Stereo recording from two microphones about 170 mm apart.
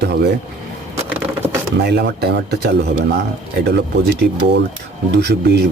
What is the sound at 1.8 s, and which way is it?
Speech, 75° right (ahead or behind).